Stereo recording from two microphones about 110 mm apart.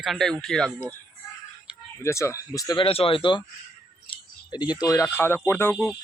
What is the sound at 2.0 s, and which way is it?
Speech, 25° left (ahead or behind).